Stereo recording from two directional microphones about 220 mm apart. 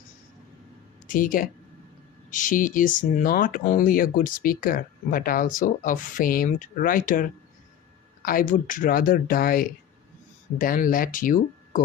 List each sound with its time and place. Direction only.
1.0 s speech: 35° left (ahead or behind)